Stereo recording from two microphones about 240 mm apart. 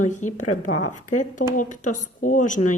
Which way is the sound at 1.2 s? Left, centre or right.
Left.